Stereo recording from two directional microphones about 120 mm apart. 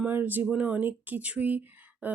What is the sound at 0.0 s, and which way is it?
A woman's voice, 15° right (ahead or behind).